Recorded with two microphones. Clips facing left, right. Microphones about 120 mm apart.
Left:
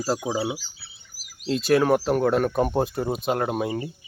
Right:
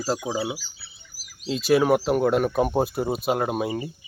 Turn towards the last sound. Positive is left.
turn(degrees=-5)  # may be behind; listen again after turning